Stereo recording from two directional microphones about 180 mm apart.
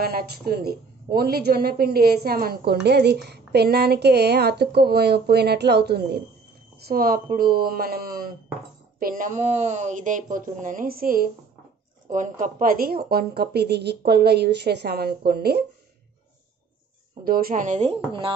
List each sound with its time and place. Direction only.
0.0 s a woman's voice: 55° right (ahead or behind)
17.2 s speech: 55° right (ahead or behind); by 18.3 s 35° right (ahead or behind)